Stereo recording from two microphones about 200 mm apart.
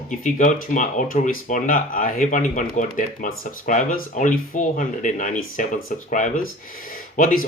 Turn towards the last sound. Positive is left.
turn(degrees=40)  # may be behind; listen again after turning